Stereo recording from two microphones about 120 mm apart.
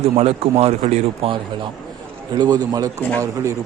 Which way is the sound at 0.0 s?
60° right (ahead or behind).